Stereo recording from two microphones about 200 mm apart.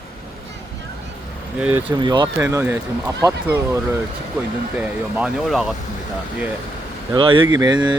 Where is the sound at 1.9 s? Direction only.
25° right (ahead or behind).